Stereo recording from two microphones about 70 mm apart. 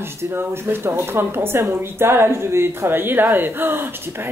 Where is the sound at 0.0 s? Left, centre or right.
Right.